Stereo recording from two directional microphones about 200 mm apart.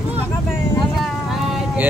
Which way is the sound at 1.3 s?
Centre (ahead or behind).